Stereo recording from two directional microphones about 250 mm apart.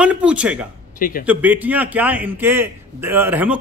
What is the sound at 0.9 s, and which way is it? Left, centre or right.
Speech, left.